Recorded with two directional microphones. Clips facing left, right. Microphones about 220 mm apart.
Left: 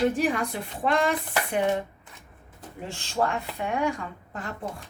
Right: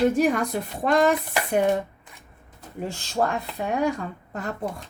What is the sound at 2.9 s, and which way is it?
A woman's voice, 40° right (ahead or behind).